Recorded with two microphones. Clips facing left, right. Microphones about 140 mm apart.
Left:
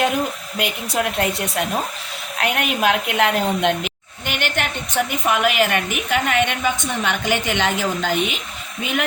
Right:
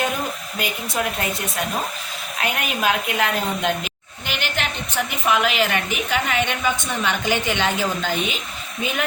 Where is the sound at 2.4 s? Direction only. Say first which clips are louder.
Left 3 dB; 65° left (ahead or behind).